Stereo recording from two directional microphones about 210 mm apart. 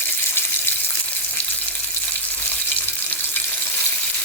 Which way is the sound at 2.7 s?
10° left (ahead or behind).